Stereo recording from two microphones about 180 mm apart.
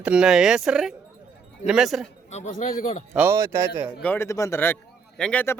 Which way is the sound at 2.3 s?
40° left (ahead or behind).